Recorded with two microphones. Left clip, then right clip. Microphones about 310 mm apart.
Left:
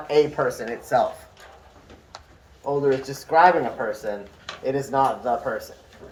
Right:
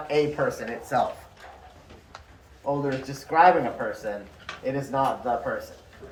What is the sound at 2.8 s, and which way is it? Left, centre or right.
Speech, left.